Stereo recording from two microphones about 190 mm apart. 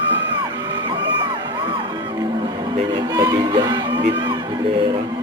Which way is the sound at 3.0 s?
20° right (ahead or behind).